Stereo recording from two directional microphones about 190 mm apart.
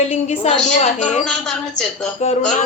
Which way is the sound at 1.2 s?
5° left (ahead or behind).